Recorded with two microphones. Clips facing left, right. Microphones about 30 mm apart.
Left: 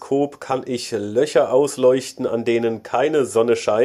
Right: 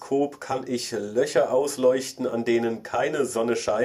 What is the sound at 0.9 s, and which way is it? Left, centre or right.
Speech, left.